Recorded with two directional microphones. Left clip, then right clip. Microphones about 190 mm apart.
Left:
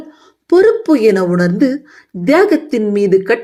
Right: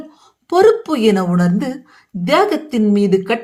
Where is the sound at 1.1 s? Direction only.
15° left (ahead or behind).